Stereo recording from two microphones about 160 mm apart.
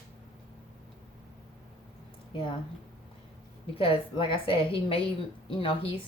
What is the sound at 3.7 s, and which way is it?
Speech, 35° left (ahead or behind).